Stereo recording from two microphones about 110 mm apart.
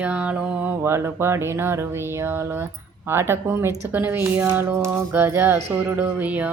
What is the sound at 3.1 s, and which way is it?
Speech, 20° right (ahead or behind).